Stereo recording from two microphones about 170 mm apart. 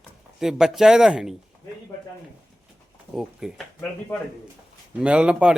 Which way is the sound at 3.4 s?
Centre (ahead or behind).